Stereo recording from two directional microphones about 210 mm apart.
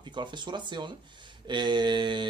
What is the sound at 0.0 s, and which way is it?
Speech, 20° right (ahead or behind).